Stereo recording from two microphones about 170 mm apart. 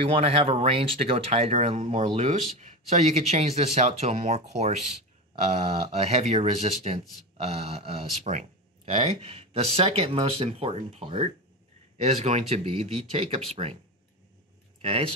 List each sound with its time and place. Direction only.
0.0 s speech: 35° right (ahead or behind)
5.9 s speech: 40° right (ahead or behind)
14.8 s speech: 35° right (ahead or behind)